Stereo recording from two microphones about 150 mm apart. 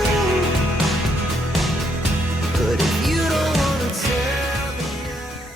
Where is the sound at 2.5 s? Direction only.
Centre (ahead or behind).